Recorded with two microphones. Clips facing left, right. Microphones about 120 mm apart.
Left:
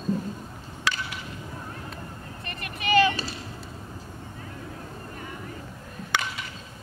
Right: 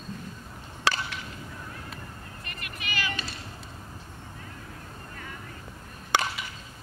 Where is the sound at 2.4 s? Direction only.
30° left (ahead or behind).